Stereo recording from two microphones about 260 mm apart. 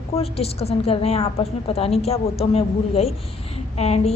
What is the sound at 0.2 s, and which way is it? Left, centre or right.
A woman's voice, left.